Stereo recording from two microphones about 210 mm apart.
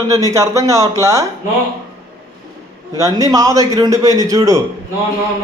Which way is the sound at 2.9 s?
15° right (ahead or behind).